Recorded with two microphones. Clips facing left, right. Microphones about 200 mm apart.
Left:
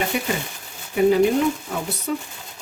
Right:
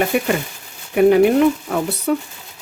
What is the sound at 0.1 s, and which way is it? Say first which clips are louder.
Speech: right 6 dB; 55° right (ahead or behind).